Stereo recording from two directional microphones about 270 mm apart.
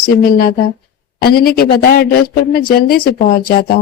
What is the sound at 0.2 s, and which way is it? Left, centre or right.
A man's voice, left.